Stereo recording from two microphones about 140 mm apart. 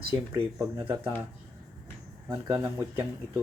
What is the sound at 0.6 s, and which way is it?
Speech, 20° right (ahead or behind).